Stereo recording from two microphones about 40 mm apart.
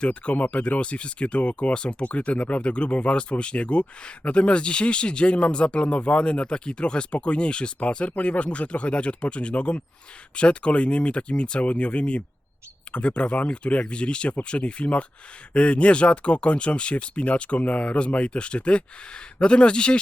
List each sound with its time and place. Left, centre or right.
0.0 s speech: left